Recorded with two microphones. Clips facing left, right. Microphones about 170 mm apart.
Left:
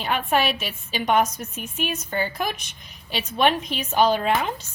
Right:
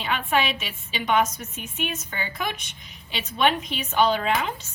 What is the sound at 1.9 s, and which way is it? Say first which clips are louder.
A woman's voice: left 6 dB; 40° left (ahead or behind).